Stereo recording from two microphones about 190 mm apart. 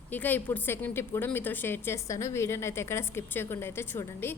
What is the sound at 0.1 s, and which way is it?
A woman's voice, 10° left (ahead or behind).